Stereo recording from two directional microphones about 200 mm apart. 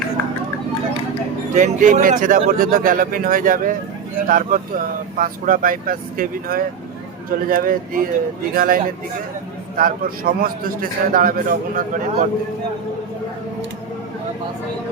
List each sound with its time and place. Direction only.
1.5 s speech: 40° right (ahead or behind)